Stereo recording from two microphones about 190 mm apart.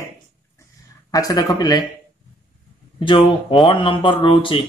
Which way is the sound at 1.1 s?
20° left (ahead or behind).